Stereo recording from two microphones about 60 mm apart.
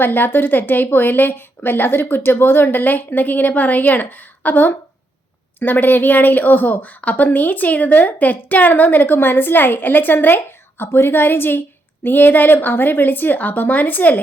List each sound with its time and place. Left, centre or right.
0.0 s speech: left